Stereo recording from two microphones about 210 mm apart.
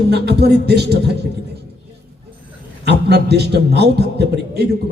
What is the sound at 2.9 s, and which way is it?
Speech, 50° right (ahead or behind).